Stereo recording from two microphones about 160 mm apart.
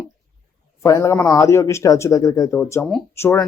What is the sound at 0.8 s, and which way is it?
Speech, 20° left (ahead or behind).